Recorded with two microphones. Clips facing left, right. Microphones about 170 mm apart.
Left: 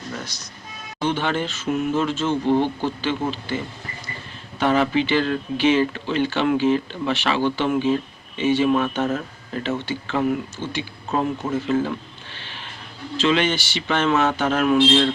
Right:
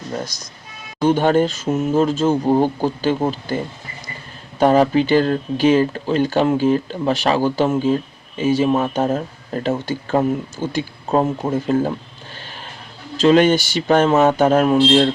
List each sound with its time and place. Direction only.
1.0 s speech: 45° right (ahead or behind)
4.6 s speech: 40° right (ahead or behind)
12.4 s a sound: 40° right (ahead or behind)
13.2 s speech: 45° right (ahead or behind)